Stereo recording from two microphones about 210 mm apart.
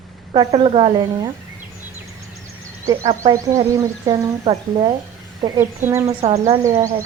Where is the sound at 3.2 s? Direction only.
15° right (ahead or behind).